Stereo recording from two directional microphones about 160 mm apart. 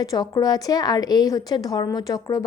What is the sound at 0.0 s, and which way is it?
Speech, 20° left (ahead or behind).